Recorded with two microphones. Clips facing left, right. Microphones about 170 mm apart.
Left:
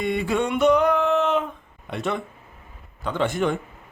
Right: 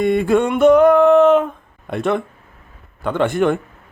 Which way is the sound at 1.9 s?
55° right (ahead or behind).